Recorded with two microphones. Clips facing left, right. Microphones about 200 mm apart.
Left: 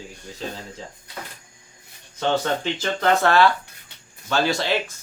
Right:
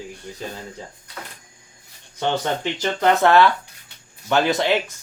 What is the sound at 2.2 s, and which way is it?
Speech, 15° right (ahead or behind).